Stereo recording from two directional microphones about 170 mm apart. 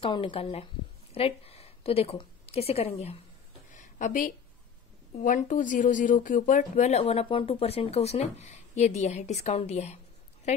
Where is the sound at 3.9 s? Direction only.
50° left (ahead or behind).